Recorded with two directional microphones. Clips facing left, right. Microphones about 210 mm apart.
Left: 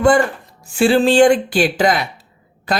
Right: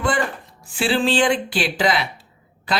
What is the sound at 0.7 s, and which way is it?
Speech, 45° left (ahead or behind).